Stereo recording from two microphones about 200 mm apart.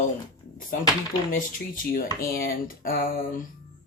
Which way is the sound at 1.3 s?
45° left (ahead or behind).